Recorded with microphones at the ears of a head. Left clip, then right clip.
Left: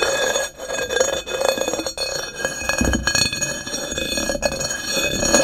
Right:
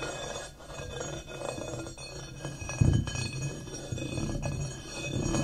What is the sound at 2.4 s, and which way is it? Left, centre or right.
Glass, left.